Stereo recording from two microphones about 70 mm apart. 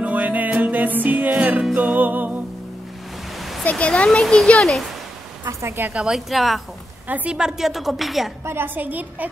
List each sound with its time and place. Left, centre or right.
0.0 s music: right
3.7 s a child's voice: centre
5.5 s speech: right
5.9 s a woman's voice: centre
7.1 s a woman's voice: centre
8.5 s a woman's voice: right